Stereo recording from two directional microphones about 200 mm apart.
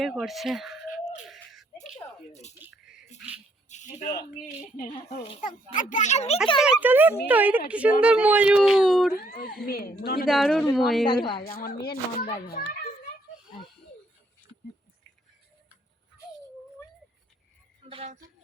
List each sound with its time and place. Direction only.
0.0 s speech: centre (ahead or behind)
2.3 s a sound: 35° left (ahead or behind)
2.6 s music: 5° right (ahead or behind)
3.7 s speech: 35° left (ahead or behind)
6.6 s speech: 5° right (ahead or behind)
9.6 s a child's voice: 50° left (ahead or behind)
10.2 s speech: centre (ahead or behind)
11.1 s a woman's voice: 25° left (ahead or behind)
11.4 s a child's voice: 50° left (ahead or behind)
17.8 s music: 30° right (ahead or behind)